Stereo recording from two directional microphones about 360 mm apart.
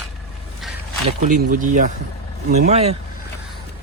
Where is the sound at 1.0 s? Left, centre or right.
Right.